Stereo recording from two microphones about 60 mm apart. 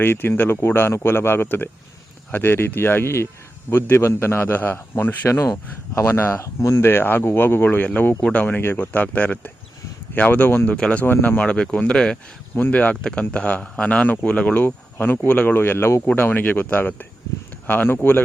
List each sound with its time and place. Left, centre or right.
0.0 s speech: left
5.9 s speech: left
6.3 s speech: left
6.8 s speech: left
10.8 s speech: centre
11.0 s speech: left
11.4 s speech: centre
12.5 s speech: left